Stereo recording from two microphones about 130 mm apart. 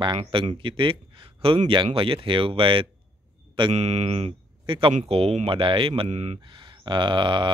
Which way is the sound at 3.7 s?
55° right (ahead or behind).